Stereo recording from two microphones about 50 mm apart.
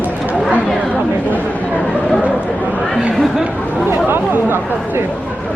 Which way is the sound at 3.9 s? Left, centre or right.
Right.